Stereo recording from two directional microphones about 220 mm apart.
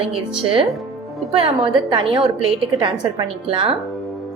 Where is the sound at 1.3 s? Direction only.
25° right (ahead or behind).